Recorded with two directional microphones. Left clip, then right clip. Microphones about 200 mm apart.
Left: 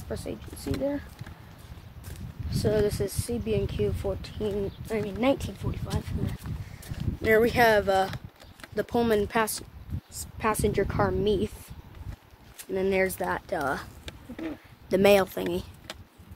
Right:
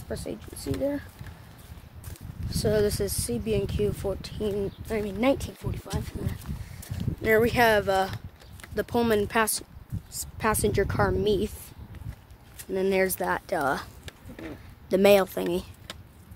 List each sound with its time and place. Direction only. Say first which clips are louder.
0.1 s speech: right 1 dB; 35° right (ahead or behind)
2.5 s speech: right 1 dB; 40° right (ahead or behind)
6.8 s a sound: right 2 dB; 20° right (ahead or behind)
7.2 s speech: even; 15° right (ahead or behind); by 11.5 s 40° right (ahead or behind)
12.7 s speech: right 1 dB; 40° right (ahead or behind)
14.9 s speech: right 1 dB; 15° right (ahead or behind)